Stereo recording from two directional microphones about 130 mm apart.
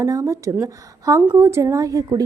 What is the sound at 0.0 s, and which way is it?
A woman's voice, 25° right (ahead or behind).